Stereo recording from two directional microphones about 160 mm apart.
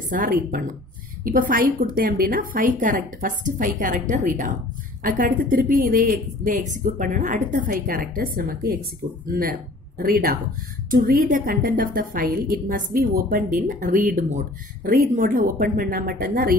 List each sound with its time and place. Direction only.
0.1 s a woman's voice: 60° right (ahead or behind)